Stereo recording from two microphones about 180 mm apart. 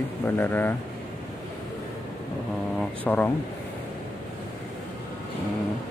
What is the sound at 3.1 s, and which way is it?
Speech, 10° left (ahead or behind).